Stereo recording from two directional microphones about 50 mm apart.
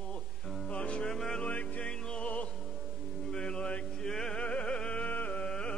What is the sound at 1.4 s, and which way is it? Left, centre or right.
Music, left.